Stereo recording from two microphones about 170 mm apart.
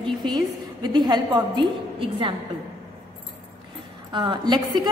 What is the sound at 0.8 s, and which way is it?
A woman's voice, 25° right (ahead or behind).